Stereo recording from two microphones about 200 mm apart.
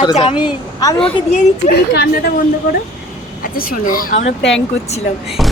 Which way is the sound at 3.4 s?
45° left (ahead or behind).